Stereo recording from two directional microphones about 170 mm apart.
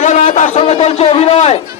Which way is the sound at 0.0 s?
45° left (ahead or behind).